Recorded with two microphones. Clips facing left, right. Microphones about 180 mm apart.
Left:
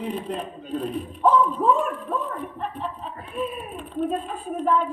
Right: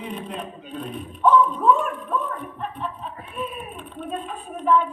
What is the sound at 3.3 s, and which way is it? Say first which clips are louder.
A man's voice: left 3 dB; 35° left (ahead or behind).